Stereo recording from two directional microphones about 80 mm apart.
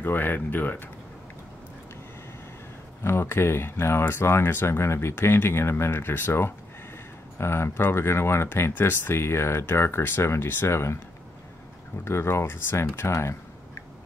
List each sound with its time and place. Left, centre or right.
0.0 s speech: left
3.0 s speech: left
12.0 s speech: left